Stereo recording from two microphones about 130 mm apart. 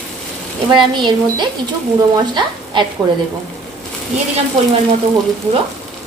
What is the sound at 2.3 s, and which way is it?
Sizzle, 35° right (ahead or behind).